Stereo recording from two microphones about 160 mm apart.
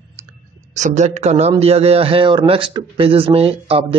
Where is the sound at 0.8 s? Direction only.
45° right (ahead or behind).